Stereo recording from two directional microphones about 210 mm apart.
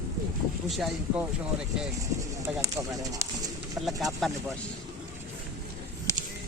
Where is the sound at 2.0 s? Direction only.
15° right (ahead or behind).